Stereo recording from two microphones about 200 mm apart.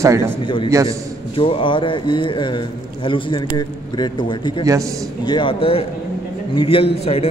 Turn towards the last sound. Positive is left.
turn(degrees=30)  # may be behind; listen again after turning